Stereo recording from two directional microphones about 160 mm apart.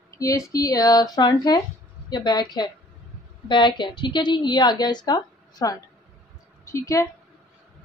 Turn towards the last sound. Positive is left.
turn(degrees=20)  # may be behind; listen again after turning